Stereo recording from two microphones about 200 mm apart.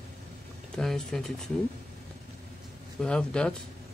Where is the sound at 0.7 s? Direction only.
Centre (ahead or behind).